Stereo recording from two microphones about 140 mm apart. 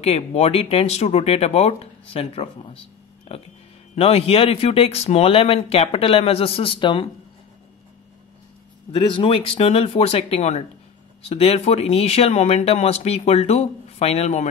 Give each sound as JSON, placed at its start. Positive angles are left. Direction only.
{"t": 0.0, "sound": "speech", "side_deg": 50}
{"t": 8.9, "sound": "speech", "side_deg": 35}